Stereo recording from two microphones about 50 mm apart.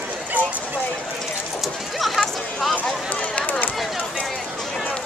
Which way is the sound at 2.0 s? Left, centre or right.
Centre.